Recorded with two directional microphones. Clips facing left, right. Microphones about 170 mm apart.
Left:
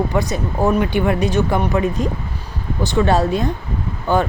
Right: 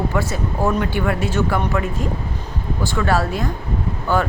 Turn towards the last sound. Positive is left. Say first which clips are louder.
# left 2 dB
turn(degrees=20)  # may be behind; listen again after turning